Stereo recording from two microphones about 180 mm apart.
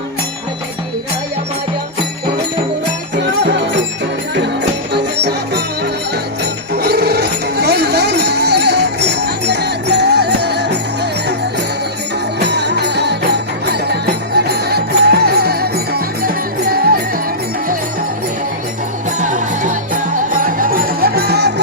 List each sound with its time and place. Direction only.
3.2 s music: 70° right (ahead or behind)
4.9 s music: 70° right (ahead or behind)
6.7 s music: 60° right (ahead or behind)
12.4 s music: 70° right (ahead or behind)
19.2 s music: 45° right (ahead or behind); by 21.5 s 65° right (ahead or behind)